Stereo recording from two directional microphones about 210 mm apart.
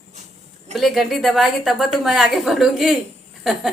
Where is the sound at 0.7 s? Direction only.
Centre (ahead or behind).